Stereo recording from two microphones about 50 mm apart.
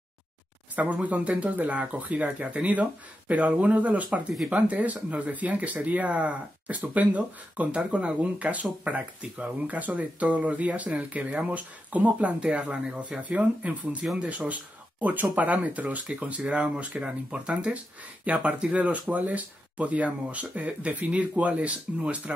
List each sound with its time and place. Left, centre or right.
0.7 s speech: right